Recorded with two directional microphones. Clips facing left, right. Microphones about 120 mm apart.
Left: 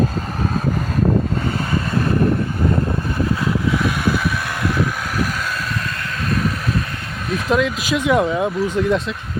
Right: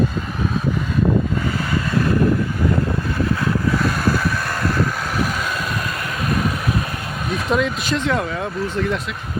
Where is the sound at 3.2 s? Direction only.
15° left (ahead or behind).